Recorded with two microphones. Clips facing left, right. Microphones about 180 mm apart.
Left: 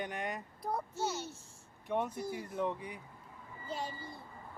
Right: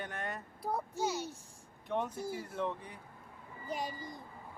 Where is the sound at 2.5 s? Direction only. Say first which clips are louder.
Left 3 dB; 10° left (ahead or behind).